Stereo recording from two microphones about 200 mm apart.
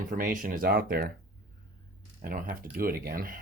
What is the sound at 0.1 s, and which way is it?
Speech, 45° right (ahead or behind).